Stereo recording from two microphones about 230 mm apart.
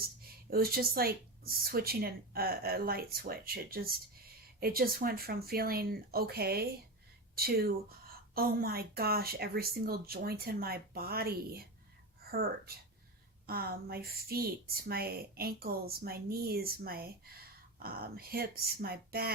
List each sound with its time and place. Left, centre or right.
0.5 s a woman's voice: right